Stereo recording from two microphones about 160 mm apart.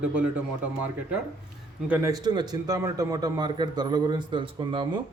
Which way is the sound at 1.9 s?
20° right (ahead or behind).